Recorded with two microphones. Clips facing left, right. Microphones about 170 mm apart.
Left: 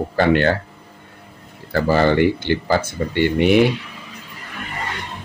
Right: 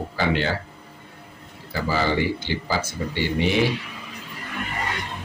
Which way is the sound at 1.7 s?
60° left (ahead or behind).